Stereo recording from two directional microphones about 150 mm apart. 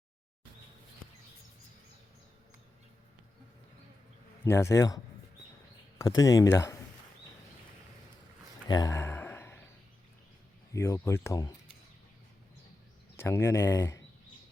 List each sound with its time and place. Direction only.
4.4 s speech: 20° left (ahead or behind)
6.0 s speech: 25° left (ahead or behind)
8.6 s a sound: 25° left (ahead or behind)
10.8 s speech: 20° left (ahead or behind)
13.1 s speech: 20° left (ahead or behind)